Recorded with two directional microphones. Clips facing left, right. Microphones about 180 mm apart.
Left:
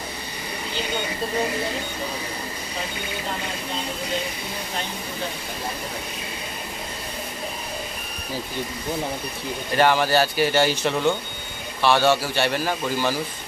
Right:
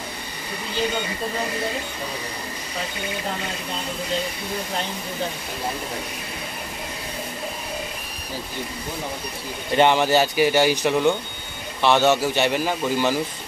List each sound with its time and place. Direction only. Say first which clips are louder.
9.8 s speech: right 2 dB; 20° right (ahead or behind)